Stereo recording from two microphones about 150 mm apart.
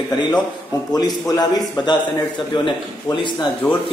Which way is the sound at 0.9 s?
25° left (ahead or behind).